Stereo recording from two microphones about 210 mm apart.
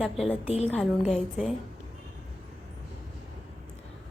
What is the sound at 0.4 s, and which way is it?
Speech, 30° left (ahead or behind).